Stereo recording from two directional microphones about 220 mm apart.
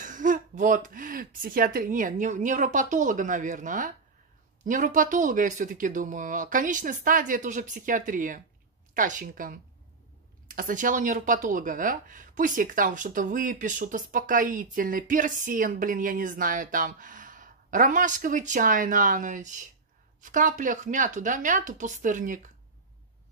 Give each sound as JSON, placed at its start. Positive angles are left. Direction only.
{"t": 0.0, "sound": "speech", "side_deg": -35}